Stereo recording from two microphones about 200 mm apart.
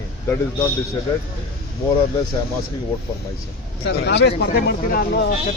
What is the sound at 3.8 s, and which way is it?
Speech, 55° left (ahead or behind).